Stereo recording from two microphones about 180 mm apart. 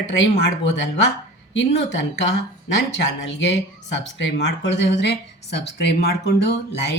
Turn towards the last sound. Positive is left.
turn(degrees=75)  # may be behind; listen again after turning